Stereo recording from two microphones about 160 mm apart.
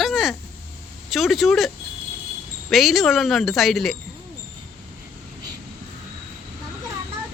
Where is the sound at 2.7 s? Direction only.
Centre (ahead or behind).